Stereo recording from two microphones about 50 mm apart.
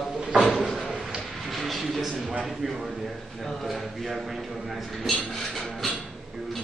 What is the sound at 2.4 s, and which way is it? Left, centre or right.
A man's voice, centre.